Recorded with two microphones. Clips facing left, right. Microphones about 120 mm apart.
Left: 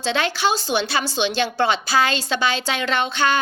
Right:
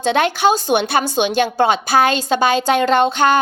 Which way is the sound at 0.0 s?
50° right (ahead or behind).